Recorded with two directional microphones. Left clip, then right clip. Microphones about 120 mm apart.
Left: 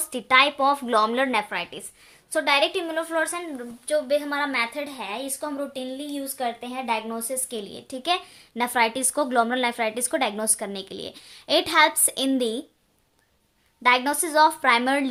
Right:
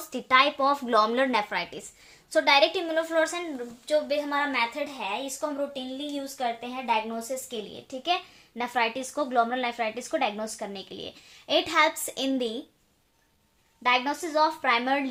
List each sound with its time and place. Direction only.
0.1 s a woman's voice: 15° left (ahead or behind)
3.8 s a woman's voice: 35° left (ahead or behind); by 12.5 s 50° left (ahead or behind)
13.8 s a woman's voice: 65° left (ahead or behind)